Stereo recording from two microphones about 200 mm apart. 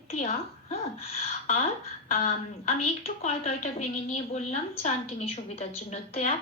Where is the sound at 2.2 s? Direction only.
30° left (ahead or behind).